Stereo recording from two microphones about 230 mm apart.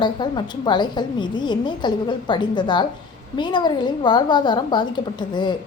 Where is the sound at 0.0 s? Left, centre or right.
Centre.